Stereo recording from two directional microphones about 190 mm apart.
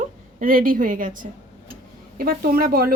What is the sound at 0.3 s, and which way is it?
A woman's voice, 45° right (ahead or behind).